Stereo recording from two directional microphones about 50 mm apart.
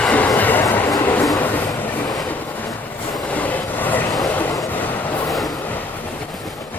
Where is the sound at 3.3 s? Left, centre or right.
Left.